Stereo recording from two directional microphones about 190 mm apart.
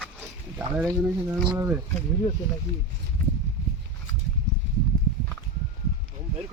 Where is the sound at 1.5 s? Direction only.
15° right (ahead or behind).